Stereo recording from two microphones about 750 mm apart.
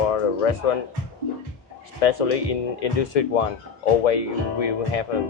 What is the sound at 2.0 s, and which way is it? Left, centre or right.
Speech, left.